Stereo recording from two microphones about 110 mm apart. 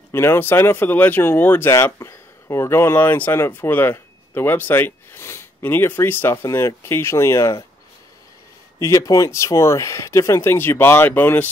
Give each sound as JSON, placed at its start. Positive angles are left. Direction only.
{"t": 0.1, "sound": "speech", "side_deg": 20}
{"t": 8.7, "sound": "speech", "side_deg": 30}